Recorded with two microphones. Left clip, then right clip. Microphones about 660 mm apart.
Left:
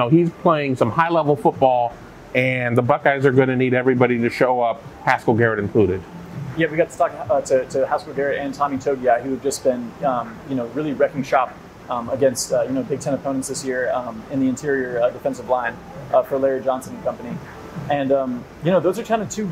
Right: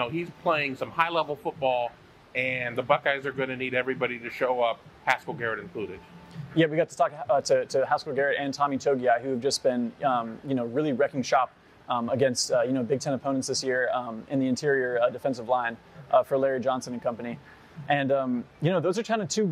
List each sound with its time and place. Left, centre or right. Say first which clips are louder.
0.0 s speech: left 12 dB; left
2.3 s speech: left 9 dB; left
6.5 s a man's voice: left 4 dB; right